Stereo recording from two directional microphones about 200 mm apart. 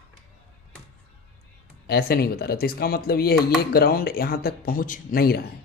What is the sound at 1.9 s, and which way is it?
A man's voice, 50° left (ahead or behind).